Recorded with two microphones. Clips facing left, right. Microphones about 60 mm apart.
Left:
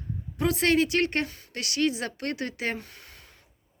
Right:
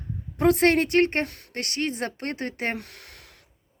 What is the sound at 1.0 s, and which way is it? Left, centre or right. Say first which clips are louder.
Speech: right 4 dB; right.